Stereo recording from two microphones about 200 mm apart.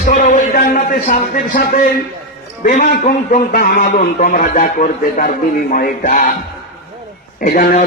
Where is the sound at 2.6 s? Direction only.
45° left (ahead or behind).